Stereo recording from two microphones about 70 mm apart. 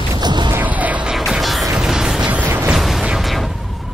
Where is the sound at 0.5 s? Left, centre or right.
Right.